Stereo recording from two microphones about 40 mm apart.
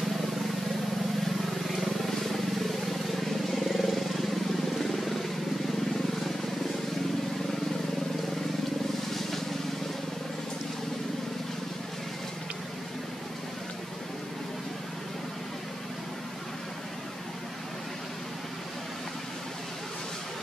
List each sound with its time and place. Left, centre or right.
1.7 s vehicle: centre